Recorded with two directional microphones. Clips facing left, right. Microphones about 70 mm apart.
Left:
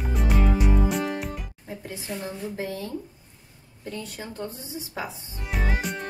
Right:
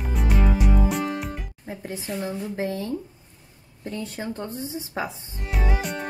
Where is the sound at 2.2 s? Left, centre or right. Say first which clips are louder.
Right 4 dB; right.